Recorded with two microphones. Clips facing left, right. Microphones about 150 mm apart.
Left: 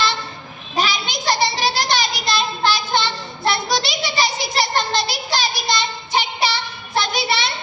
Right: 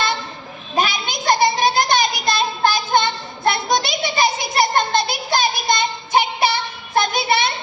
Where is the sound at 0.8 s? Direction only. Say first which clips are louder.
Right 1 dB; 50° right (ahead or behind).